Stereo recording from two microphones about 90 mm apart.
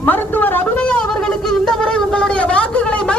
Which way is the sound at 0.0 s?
20° left (ahead or behind).